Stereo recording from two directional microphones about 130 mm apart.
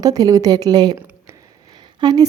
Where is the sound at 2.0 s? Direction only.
35° right (ahead or behind).